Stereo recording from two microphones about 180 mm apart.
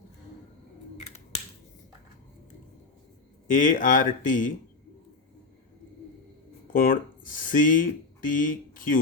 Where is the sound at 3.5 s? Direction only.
45° left (ahead or behind).